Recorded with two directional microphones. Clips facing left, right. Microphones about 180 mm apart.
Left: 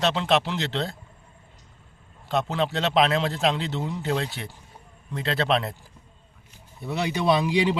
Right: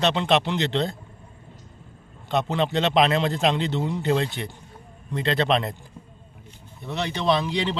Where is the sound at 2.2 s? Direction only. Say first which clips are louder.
Right 1 dB; centre (ahead or behind).